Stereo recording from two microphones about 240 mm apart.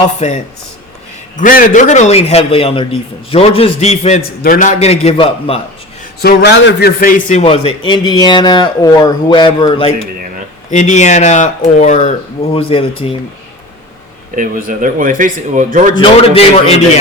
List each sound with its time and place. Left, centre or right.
0.2 s speech: left
6.2 s speech: left; by 9.9 s centre
10.7 s speech: left
14.3 s speech: right
16.0 s speech: left